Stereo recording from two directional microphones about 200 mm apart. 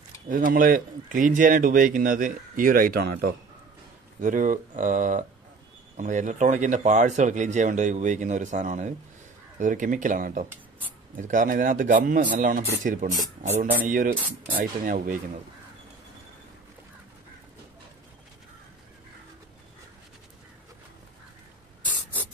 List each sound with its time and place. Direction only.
0.3 s speech: 45° right (ahead or behind)